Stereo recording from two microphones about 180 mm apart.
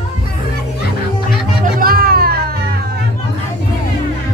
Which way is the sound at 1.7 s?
55° right (ahead or behind).